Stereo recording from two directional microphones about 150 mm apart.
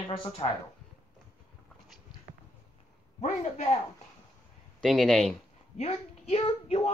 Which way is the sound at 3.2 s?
50° left (ahead or behind).